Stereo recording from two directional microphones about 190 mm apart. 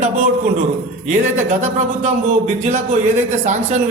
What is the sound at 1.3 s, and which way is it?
Speech, 35° right (ahead or behind).